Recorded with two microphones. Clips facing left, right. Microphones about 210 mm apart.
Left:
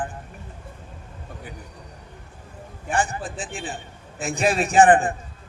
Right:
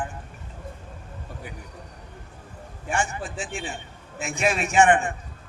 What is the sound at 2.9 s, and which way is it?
Speech, 35° left (ahead or behind).